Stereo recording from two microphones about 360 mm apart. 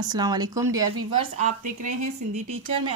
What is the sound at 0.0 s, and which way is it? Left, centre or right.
Speech, centre.